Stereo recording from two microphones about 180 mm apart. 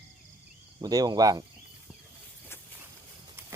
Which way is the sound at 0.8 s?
20° right (ahead or behind).